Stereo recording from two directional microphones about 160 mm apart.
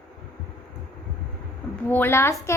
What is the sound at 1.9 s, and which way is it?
Speech, 15° left (ahead or behind).